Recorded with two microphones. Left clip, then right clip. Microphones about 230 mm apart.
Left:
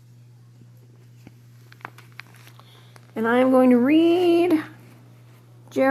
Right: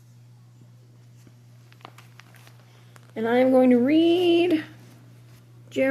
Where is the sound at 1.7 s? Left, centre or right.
Left.